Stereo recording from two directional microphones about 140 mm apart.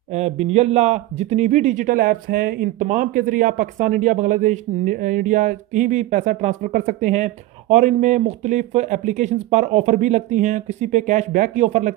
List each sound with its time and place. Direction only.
0.1 s a man's voice: 50° right (ahead or behind)